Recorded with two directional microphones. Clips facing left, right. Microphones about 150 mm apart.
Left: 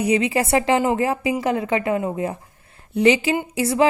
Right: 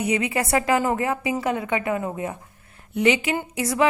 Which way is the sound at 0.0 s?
30° left (ahead or behind).